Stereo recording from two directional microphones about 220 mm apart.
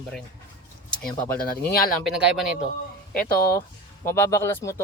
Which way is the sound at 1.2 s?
40° left (ahead or behind).